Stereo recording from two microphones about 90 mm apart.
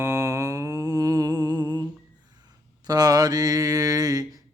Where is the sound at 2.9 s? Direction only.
45° right (ahead or behind).